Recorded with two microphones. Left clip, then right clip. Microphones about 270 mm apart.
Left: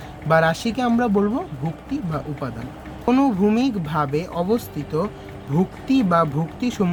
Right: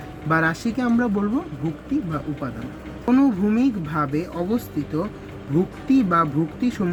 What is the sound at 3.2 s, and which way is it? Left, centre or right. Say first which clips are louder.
Speech: left 1 dB; left.